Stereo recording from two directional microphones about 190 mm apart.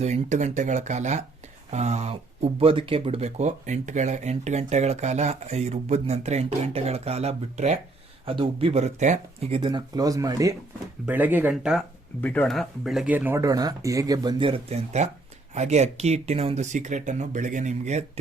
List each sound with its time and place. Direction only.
0.0 s speech: 35° right (ahead or behind); by 11.8 s 5° right (ahead or behind)
12.2 s speech: 5° left (ahead or behind); by 18.0 s 40° right (ahead or behind)